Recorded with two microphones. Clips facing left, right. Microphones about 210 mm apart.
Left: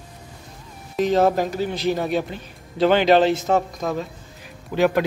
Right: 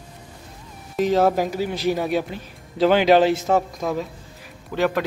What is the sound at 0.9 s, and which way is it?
Speech, 5° right (ahead or behind).